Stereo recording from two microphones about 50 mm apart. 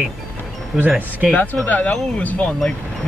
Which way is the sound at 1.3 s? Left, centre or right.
Left.